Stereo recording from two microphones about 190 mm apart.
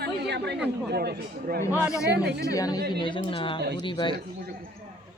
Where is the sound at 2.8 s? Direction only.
55° right (ahead or behind).